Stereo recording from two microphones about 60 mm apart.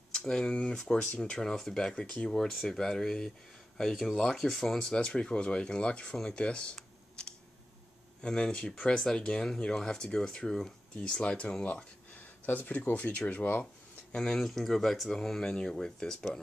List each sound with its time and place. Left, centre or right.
0.1 s speech: centre
6.1 s computer keyboard: centre
8.2 s speech: centre
14.1 s speech: centre